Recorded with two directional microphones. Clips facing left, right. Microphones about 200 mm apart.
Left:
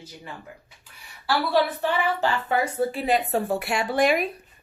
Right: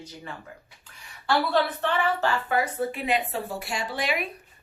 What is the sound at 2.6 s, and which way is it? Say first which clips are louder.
Speech: left 3 dB; 30° left (ahead or behind).